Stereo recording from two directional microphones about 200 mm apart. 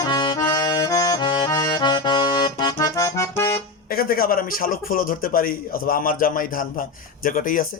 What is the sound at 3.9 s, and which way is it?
A man's voice, 50° left (ahead or behind).